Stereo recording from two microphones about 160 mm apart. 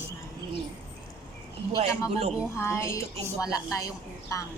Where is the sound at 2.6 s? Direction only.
15° left (ahead or behind).